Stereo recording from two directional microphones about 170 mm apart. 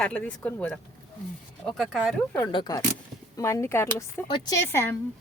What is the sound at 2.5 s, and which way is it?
A woman's voice, 25° left (ahead or behind).